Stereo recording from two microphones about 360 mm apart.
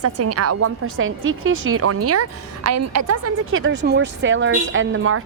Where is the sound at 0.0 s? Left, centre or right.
Right.